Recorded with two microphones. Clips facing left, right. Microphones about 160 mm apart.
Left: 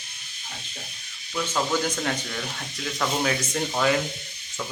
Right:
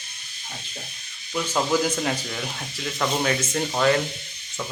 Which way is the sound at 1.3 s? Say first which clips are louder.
Right 3 dB; 5° right (ahead or behind).